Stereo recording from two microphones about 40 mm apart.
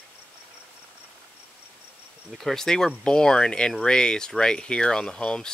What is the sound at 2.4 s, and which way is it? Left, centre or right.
Speech, centre.